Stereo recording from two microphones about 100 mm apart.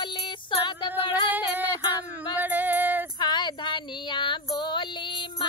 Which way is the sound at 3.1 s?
50° left (ahead or behind).